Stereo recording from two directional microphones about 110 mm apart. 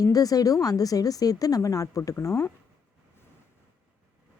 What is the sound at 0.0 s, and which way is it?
A woman's voice, 35° left (ahead or behind).